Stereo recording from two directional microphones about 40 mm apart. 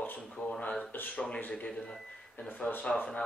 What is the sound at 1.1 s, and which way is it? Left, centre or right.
Speech, left.